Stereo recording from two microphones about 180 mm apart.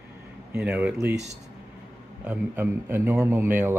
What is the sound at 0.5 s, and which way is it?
Speech, 5° right (ahead or behind).